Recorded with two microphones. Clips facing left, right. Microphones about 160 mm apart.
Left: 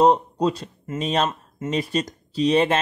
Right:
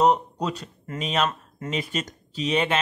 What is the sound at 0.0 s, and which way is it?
A man's voice, 30° left (ahead or behind).